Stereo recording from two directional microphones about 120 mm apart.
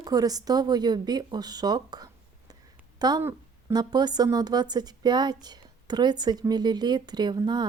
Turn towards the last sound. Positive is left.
turn(degrees=-35)  # may be behind; listen again after turning